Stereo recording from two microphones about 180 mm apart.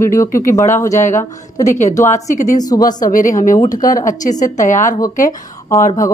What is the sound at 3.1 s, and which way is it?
Speech, 45° left (ahead or behind).